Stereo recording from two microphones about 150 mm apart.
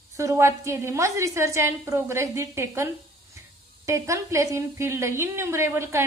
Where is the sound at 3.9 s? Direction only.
20° right (ahead or behind).